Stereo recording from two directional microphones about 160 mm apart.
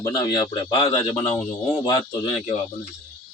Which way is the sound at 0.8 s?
35° left (ahead or behind).